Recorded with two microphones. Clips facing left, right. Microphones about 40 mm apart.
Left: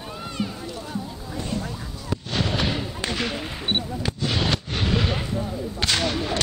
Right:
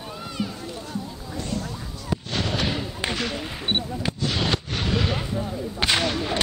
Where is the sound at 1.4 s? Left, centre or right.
Centre.